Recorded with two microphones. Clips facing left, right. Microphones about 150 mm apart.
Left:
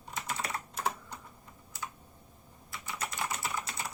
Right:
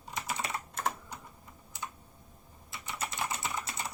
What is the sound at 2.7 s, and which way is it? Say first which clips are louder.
Typing: even; 25° right (ahead or behind).